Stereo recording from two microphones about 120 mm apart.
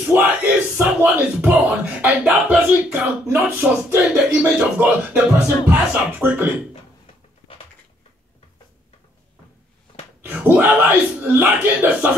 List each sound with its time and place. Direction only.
0.1 s speech: 15° right (ahead or behind)
10.2 s speech: 15° right (ahead or behind)